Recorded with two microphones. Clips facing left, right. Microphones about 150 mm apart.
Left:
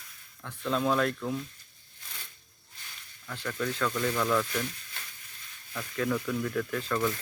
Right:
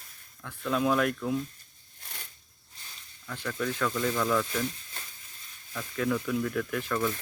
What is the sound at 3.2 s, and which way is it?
Speech, 10° left (ahead or behind).